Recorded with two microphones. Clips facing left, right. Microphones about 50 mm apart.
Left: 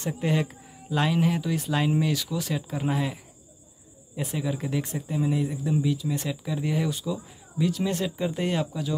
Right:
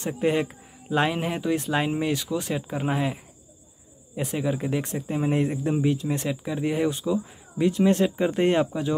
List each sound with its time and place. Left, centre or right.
0.0 s speech: right
5.0 s a man's voice: right
5.3 s a man's voice: right
6.2 s speech: right